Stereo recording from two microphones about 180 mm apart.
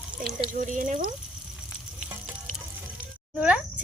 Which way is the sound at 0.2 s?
50° right (ahead or behind).